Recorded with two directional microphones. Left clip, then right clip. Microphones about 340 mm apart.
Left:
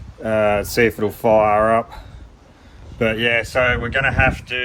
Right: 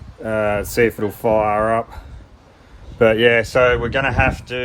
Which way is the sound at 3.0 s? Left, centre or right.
Right.